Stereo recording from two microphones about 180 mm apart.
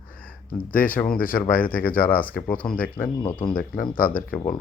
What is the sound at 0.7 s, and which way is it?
Speech, 50° left (ahead or behind).